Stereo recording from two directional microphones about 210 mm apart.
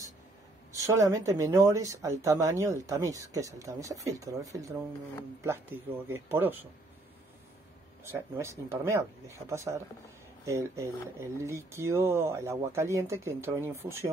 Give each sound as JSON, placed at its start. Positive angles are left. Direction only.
{"t": 0.7, "sound": "speech", "side_deg": -15}
{"t": 6.0, "sound": "speech", "side_deg": -10}
{"t": 8.0, "sound": "speech", "side_deg": -15}